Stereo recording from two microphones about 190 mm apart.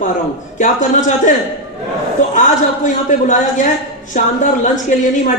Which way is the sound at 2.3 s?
40° left (ahead or behind).